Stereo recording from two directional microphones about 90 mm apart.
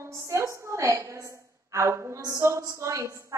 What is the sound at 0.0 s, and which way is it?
A woman's voice, 30° right (ahead or behind).